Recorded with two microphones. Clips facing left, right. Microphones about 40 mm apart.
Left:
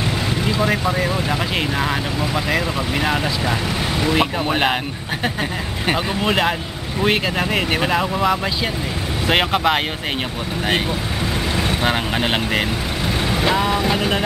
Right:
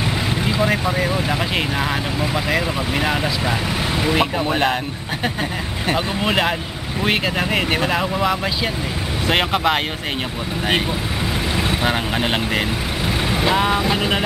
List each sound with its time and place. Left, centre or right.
0.5 s speech: centre
2.3 s speech: centre
4.5 s speech: centre
5.9 s speech: centre
11.5 s speech: centre
13.3 s vehicle: centre
13.8 s speech: centre